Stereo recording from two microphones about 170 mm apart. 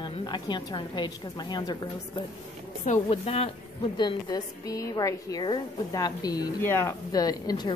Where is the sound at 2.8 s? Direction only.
40° left (ahead or behind).